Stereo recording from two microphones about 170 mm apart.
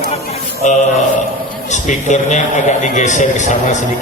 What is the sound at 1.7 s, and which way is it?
A man's voice, 45° left (ahead or behind).